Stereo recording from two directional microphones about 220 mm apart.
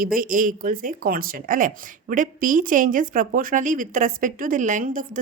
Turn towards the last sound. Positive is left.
turn(degrees=-35)  # may be behind; listen again after turning